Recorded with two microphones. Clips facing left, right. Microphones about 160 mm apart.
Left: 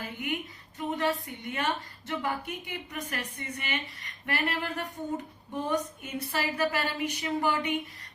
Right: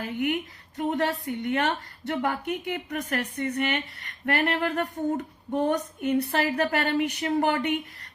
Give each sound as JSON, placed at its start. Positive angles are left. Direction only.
{"t": 0.0, "sound": "a woman's voice", "side_deg": -60}